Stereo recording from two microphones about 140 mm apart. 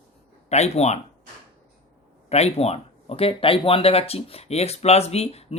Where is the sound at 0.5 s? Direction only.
50° left (ahead or behind).